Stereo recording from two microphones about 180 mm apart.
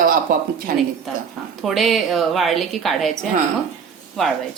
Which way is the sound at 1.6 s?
Centre (ahead or behind).